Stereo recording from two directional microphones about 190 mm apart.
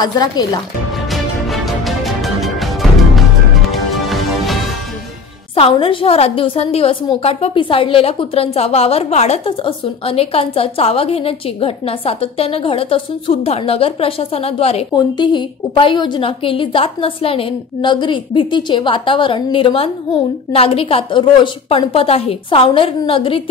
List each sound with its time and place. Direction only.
0.0 s a woman's voice: 20° left (ahead or behind)
1.1 s music: centre (ahead or behind)
5.5 s a woman's voice: 30° left (ahead or behind)